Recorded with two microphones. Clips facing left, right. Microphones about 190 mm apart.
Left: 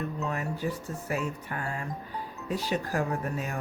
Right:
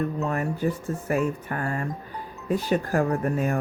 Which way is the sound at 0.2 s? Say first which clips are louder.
Right 6 dB; 50° right (ahead or behind).